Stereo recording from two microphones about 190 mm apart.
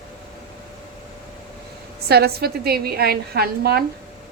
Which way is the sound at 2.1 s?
55° right (ahead or behind).